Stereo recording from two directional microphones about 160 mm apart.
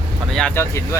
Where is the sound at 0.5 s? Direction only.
15° left (ahead or behind).